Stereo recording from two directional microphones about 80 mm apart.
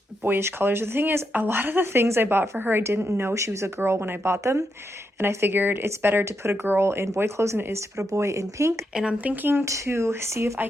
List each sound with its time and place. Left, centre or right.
0.3 s speech: right
9.0 s speech: centre
9.6 s speech: right